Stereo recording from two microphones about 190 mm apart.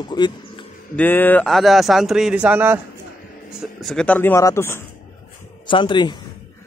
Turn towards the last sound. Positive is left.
turn(degrees=25)  # may be behind; listen again after turning